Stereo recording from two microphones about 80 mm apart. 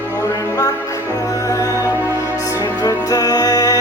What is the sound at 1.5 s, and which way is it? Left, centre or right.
Music, left.